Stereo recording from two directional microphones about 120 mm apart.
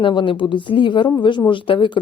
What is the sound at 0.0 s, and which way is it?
A woman's voice, 45° left (ahead or behind).